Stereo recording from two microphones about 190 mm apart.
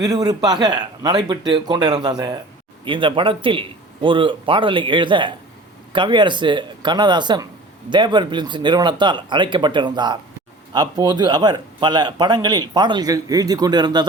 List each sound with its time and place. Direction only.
0.0 s speech: 20° right (ahead or behind)